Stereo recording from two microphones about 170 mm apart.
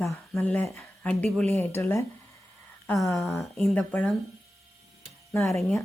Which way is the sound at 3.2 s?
Centre (ahead or behind).